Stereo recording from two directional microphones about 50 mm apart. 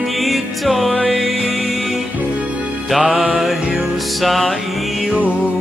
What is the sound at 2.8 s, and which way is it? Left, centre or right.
Music, centre.